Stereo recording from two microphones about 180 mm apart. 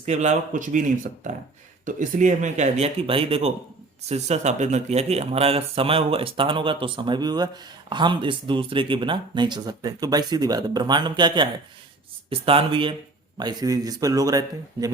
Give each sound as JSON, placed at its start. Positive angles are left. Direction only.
{"t": 0.0, "sound": "speech", "side_deg": -40}